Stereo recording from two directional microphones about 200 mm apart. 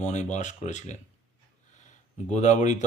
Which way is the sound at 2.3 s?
35° left (ahead or behind).